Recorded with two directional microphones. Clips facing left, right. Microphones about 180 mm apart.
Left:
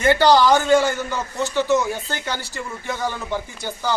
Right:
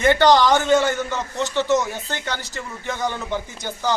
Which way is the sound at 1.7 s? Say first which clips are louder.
Left 1 dB; 20° right (ahead or behind).